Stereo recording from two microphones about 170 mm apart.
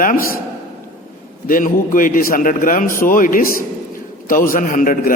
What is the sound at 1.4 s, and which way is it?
A man's voice, 50° left (ahead or behind).